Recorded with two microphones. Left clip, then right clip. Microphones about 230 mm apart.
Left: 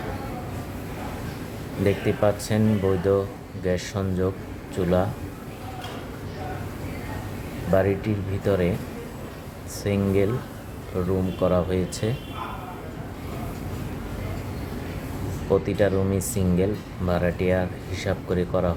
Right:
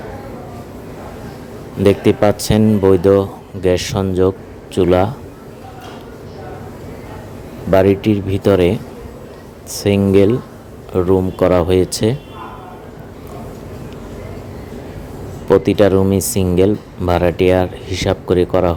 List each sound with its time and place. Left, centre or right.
1.8 s speech: right
7.7 s speech: right
9.7 s speech: right
15.6 s speech: right